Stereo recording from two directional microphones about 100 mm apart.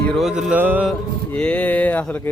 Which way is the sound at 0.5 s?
20° right (ahead or behind).